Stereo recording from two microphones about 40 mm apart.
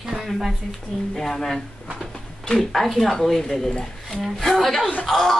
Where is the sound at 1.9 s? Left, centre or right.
Centre.